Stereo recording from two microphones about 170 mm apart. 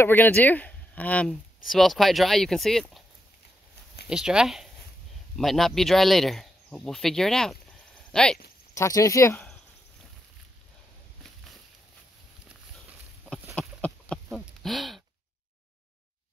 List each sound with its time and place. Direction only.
0.0 s speech: 10° left (ahead or behind)
4.1 s speech: 5° right (ahead or behind)
8.7 s speech: 20° left (ahead or behind)
13.6 s a sound: 5° left (ahead or behind)